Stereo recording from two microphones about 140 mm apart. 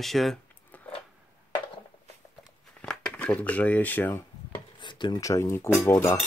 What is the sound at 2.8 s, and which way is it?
Speech, 5° left (ahead or behind).